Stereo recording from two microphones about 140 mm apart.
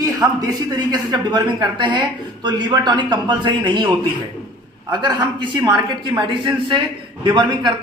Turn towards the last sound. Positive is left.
turn(degrees=-35)  # may be behind; listen again after turning